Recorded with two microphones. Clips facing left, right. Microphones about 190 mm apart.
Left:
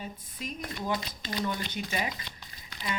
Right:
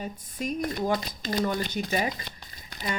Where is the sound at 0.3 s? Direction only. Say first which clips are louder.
Right 10 dB; 45° right (ahead or behind).